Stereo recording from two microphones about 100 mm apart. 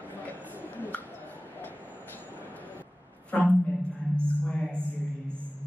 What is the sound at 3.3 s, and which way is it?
Speech, 15° left (ahead or behind).